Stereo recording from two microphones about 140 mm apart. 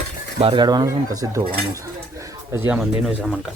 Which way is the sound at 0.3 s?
45° right (ahead or behind).